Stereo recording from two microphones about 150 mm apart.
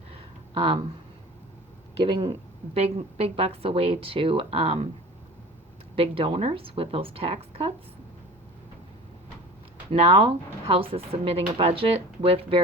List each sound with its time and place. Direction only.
0.5 s speech: 35° right (ahead or behind)
2.0 s speech: 30° right (ahead or behind)
2.7 s speech: 45° right (ahead or behind)
6.0 s speech: 35° right (ahead or behind)
9.9 s speech: 40° right (ahead or behind)